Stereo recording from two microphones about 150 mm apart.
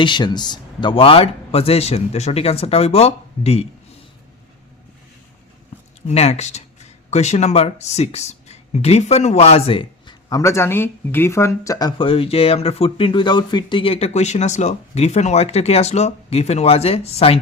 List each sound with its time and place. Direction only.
0.0 s speech: 30° left (ahead or behind)
6.1 s speech: 45° left (ahead or behind)
10.2 s speech: 20° left (ahead or behind); by 17.3 s 45° left (ahead or behind)